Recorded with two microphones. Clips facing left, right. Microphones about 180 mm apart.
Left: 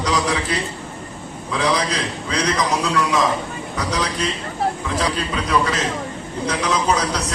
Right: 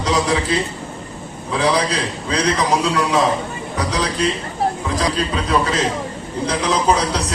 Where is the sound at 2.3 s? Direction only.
30° right (ahead or behind).